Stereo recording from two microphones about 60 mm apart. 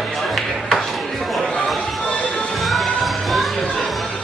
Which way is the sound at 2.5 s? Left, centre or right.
Centre.